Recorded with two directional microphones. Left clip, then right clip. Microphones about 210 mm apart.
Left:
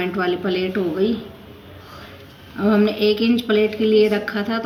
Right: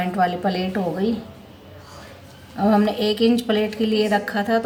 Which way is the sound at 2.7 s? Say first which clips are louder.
Left 3 dB; 75° right (ahead or behind).